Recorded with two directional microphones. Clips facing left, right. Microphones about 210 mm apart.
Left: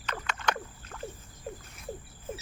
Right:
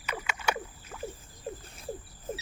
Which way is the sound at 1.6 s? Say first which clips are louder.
Right 2 dB; 30° right (ahead or behind).